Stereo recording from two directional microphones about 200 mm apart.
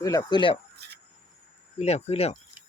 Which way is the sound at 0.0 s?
15° left (ahead or behind).